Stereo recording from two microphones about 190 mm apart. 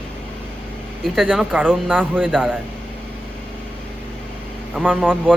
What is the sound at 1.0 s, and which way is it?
Speech, centre (ahead or behind).